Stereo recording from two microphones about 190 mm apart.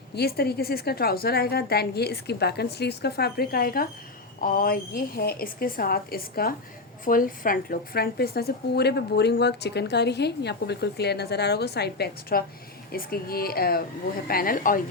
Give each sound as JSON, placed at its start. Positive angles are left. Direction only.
{"t": 0.2, "sound": "a woman's voice", "side_deg": 55}